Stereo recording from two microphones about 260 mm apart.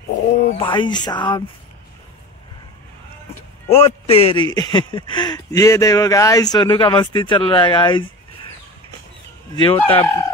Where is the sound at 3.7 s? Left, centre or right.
Left.